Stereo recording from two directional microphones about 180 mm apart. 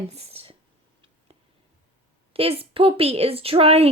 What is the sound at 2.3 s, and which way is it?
Speech, 30° right (ahead or behind).